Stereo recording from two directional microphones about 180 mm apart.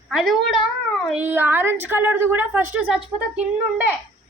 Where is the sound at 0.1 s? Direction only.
Centre (ahead or behind).